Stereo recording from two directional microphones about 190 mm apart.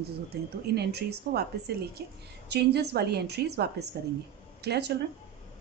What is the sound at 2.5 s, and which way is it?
Speech, 60° right (ahead or behind).